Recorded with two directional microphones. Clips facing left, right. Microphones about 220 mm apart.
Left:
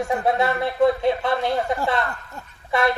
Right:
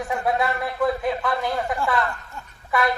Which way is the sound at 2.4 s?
40° left (ahead or behind).